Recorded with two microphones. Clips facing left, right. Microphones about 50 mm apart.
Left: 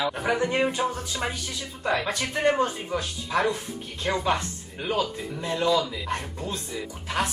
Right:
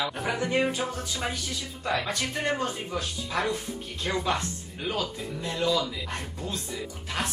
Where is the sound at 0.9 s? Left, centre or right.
Centre.